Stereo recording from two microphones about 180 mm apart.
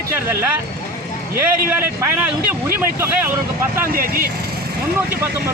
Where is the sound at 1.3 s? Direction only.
10° right (ahead or behind).